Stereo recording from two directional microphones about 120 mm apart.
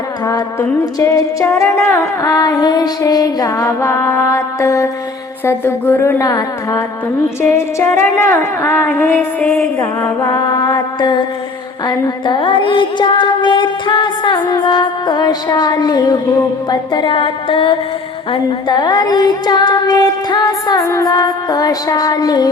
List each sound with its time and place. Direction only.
1.1 s music: 25° left (ahead or behind)
8.9 s a sound: 15° left (ahead or behind)
10.2 s mantra: 30° left (ahead or behind)
11.9 s music: 40° left (ahead or behind)
18.3 s music: 35° left (ahead or behind)